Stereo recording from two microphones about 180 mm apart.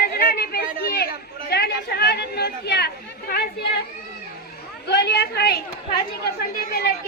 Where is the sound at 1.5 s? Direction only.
65° left (ahead or behind).